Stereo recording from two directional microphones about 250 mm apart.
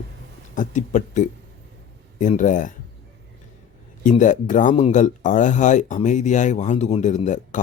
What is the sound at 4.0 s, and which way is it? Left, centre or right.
A man's voice, left.